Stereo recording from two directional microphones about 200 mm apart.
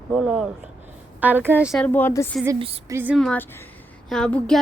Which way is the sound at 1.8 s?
10° left (ahead or behind).